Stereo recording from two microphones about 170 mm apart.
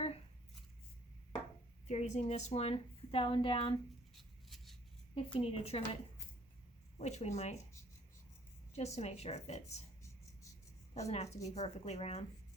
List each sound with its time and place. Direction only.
1.9 s a woman's voice: 40° left (ahead or behind)
4.1 s a sound: centre (ahead or behind)
5.1 s a woman's voice: 35° left (ahead or behind)
7.0 s a woman's voice: 40° left (ahead or behind)
8.7 s a woman's voice: 40° left (ahead or behind)
11.1 s a woman's voice: 40° left (ahead or behind)